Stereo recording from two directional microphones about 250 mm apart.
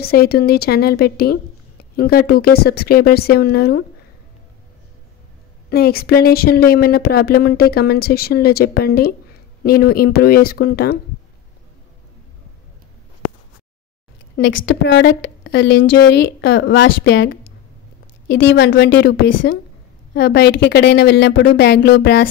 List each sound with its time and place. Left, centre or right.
0.0 s speech: left
5.7 s speech: left
14.3 s a woman's voice: left